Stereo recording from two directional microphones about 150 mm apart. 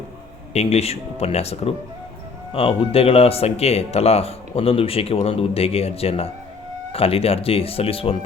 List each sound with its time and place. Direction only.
0.5 s speech: 45° left (ahead or behind)